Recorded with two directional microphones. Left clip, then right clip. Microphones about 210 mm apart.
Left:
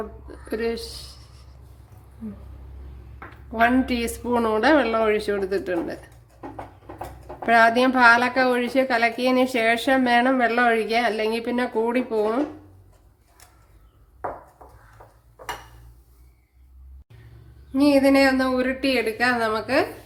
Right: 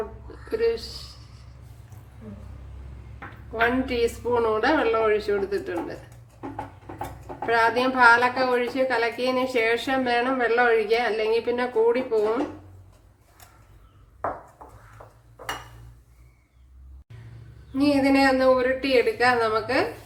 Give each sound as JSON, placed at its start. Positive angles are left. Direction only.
{"t": 0.4, "sound": "a woman's voice", "side_deg": 40}
{"t": 3.5, "sound": "a woman's voice", "side_deg": 45}
{"t": 7.4, "sound": "a woman's voice", "side_deg": 45}
{"t": 17.7, "sound": "a woman's voice", "side_deg": 45}